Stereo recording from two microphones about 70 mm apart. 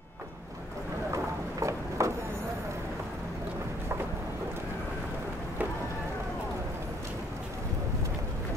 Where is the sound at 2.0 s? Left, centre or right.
Right.